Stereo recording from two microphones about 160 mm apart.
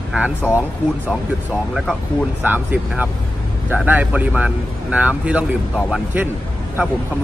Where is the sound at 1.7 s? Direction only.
5° left (ahead or behind).